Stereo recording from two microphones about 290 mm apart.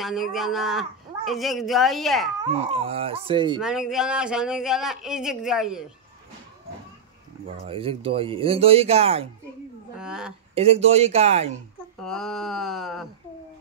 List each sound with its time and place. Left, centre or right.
0.0 s speech: centre
2.5 s speech: right
3.6 s speech: centre
7.4 s speech: centre
9.9 s a woman's voice: centre
10.5 s speech: right
12.0 s speech: centre